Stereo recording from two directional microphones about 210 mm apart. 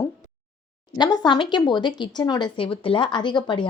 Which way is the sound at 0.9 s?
20° left (ahead or behind).